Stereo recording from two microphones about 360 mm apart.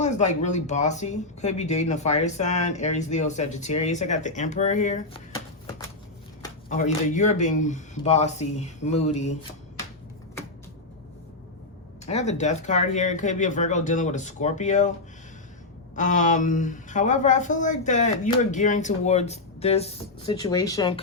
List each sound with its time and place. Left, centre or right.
0.0 s speech: centre
6.7 s speech: left
12.0 s speech: centre
16.0 s speech: left